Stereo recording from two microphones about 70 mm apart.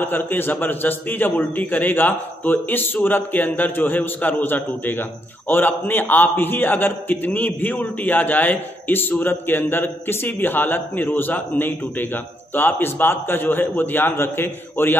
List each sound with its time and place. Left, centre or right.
0.3 s a man's voice: left